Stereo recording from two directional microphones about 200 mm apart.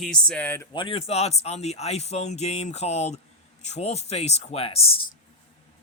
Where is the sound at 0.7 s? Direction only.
25° left (ahead or behind).